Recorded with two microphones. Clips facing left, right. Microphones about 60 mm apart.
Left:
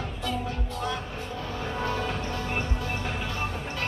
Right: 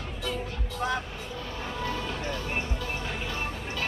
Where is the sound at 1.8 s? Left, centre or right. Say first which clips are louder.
Left 3 dB; left.